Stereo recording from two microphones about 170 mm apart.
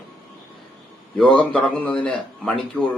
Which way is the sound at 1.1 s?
5° left (ahead or behind).